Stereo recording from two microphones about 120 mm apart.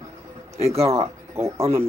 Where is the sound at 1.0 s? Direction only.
20° right (ahead or behind).